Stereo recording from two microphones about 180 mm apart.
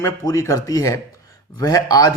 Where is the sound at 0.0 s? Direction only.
20° left (ahead or behind).